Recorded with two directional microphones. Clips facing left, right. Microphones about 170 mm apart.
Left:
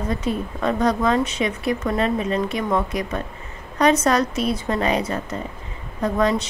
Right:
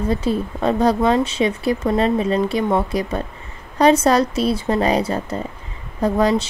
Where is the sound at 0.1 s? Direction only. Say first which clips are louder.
Right 3 dB; 30° right (ahead or behind).